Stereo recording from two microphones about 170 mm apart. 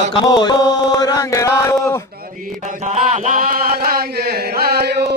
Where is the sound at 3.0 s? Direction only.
45° right (ahead or behind).